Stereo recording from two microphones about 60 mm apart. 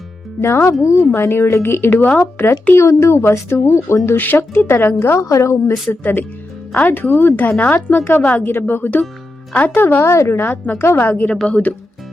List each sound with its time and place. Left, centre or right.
0.4 s speech: left
0.7 s a woman's voice: left
1.1 s speech: left
5.2 s a woman's voice: left
6.0 s speech: left
7.6 s speech: left
7.9 s speech: left
8.2 s speech: left
8.4 s speech: left
10.0 s speech: left
11.4 s speech: left